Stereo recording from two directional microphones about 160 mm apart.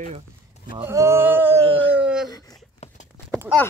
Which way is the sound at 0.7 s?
15° right (ahead or behind).